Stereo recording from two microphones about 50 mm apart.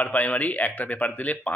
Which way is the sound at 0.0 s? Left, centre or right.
Left.